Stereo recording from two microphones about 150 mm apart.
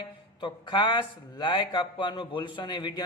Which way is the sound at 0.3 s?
30° left (ahead or behind).